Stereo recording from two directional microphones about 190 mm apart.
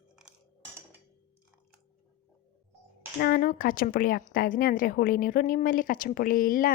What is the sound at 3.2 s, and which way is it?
Speech, 50° left (ahead or behind).